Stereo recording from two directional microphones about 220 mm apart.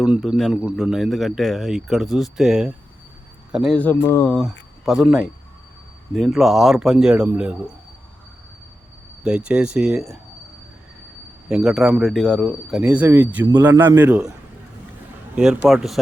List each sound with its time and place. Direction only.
0.0 s speech: 5° right (ahead or behind)
9.2 s speech: 5° right (ahead or behind)
11.4 s speech: 5° right (ahead or behind)
15.4 s speech: 5° right (ahead or behind)